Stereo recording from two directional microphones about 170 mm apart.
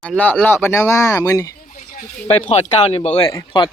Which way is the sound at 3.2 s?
25° left (ahead or behind).